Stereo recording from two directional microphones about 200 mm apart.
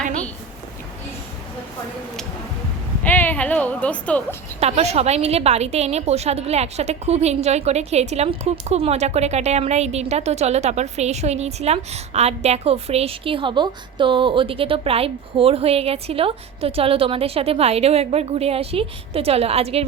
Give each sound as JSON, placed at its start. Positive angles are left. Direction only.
{"t": 3.0, "sound": "speech", "side_deg": 10}
{"t": 4.6, "sound": "a woman's voice", "side_deg": -30}